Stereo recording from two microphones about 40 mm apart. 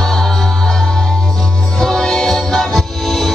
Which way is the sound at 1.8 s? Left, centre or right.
Centre.